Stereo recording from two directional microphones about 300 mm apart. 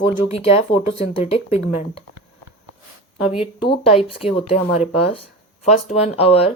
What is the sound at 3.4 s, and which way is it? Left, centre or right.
Speech, centre.